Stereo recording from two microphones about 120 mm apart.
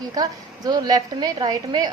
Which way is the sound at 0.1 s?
35° right (ahead or behind).